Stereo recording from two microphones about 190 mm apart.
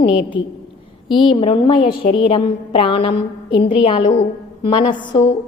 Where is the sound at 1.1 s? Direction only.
25° left (ahead or behind).